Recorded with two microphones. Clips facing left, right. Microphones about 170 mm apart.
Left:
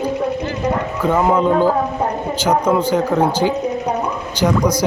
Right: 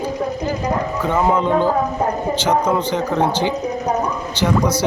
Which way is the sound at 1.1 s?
10° left (ahead or behind).